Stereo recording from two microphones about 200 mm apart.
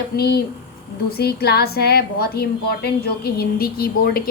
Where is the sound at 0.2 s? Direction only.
50° left (ahead or behind).